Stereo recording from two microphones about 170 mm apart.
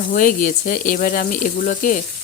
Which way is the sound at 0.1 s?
55° left (ahead or behind).